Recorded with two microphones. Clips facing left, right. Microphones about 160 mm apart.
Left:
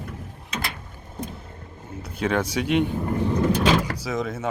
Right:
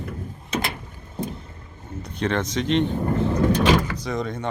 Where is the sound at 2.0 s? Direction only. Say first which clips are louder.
Left 1 dB; 5° left (ahead or behind).